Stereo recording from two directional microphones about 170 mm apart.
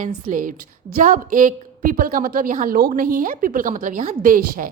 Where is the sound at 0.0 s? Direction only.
50° right (ahead or behind).